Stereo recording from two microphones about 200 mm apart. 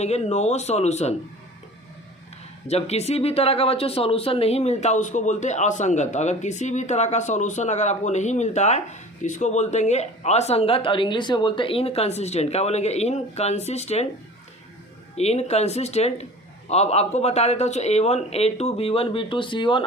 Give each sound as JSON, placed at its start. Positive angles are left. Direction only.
{"t": 0.0, "sound": "speech", "side_deg": 35}
{"t": 2.6, "sound": "speech", "side_deg": 30}
{"t": 15.1, "sound": "speech", "side_deg": 30}